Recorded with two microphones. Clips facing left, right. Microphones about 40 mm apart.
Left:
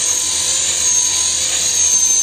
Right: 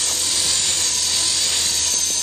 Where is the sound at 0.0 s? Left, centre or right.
Left.